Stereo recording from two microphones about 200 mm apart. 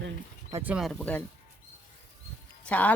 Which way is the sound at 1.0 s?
10° left (ahead or behind).